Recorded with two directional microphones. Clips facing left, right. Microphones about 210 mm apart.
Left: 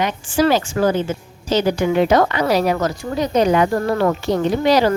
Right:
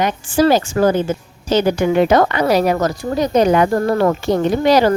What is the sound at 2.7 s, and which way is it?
A woman's voice, 40° right (ahead or behind).